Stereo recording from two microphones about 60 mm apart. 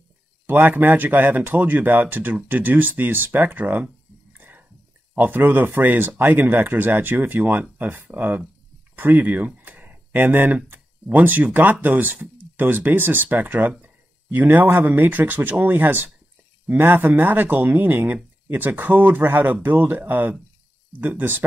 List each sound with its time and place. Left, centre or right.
0.5 s speech: right
3.3 s a sound: right
5.1 s speech: right